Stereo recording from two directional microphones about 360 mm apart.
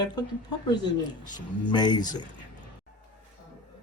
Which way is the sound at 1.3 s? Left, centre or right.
Centre.